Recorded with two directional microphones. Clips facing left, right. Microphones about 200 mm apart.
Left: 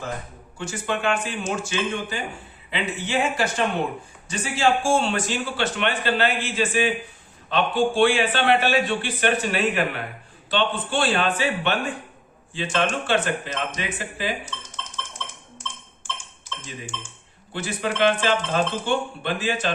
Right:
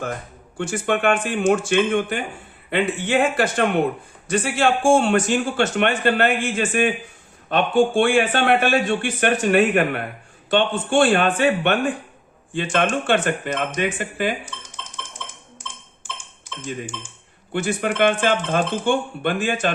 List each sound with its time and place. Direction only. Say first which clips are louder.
0.5 s a man's voice: right 6 dB; 55° right (ahead or behind)
17.5 s a man's voice: right 5 dB; 50° right (ahead or behind)